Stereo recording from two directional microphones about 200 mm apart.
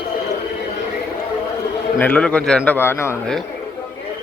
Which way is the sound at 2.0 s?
5° left (ahead or behind).